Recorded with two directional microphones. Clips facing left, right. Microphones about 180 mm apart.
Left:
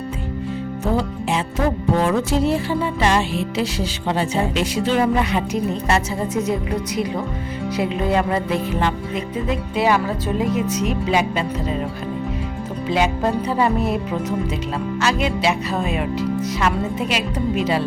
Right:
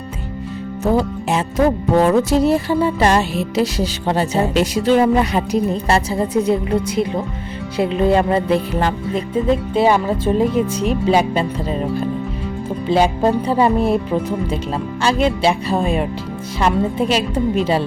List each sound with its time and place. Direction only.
0.9 s music: 45° right (ahead or behind)
12.9 s music: 30° right (ahead or behind)